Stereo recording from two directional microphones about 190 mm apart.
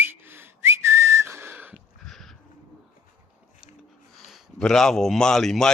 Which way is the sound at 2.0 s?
Centre (ahead or behind).